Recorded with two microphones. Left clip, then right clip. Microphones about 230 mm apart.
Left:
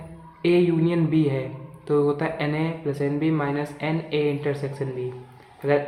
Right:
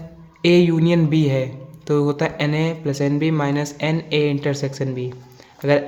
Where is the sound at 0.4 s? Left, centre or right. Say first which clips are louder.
Right 4 dB; right.